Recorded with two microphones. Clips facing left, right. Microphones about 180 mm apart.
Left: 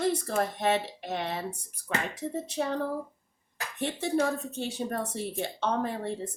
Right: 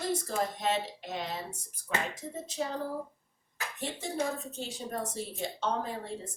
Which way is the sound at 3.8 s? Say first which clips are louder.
Left 6 dB; 65° left (ahead or behind).